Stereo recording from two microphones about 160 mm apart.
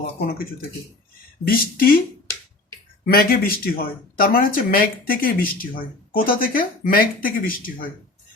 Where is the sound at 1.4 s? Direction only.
65° left (ahead or behind).